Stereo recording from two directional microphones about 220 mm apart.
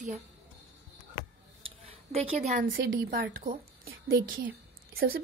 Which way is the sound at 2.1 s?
35° right (ahead or behind).